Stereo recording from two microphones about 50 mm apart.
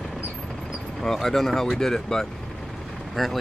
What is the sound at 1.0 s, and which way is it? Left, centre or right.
Speech, centre.